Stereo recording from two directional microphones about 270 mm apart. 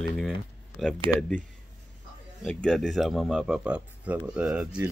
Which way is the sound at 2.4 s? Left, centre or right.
Centre.